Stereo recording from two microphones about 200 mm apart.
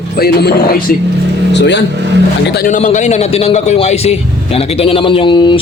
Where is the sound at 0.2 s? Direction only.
50° left (ahead or behind).